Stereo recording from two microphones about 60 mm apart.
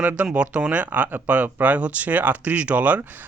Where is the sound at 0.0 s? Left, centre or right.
Right.